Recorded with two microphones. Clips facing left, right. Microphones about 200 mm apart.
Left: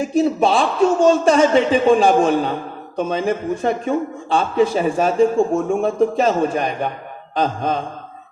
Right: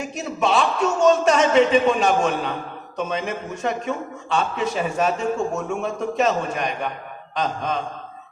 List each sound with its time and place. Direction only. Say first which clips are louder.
0.0 s a man's voice: left 8 dB; 30° left (ahead or behind)